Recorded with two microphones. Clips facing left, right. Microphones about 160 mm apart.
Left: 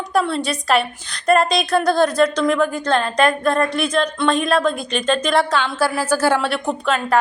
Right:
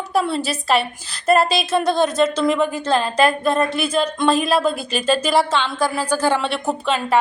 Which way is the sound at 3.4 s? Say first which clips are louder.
Even; 25° right (ahead or behind).